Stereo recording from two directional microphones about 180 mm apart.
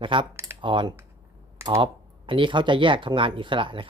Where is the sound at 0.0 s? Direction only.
30° right (ahead or behind).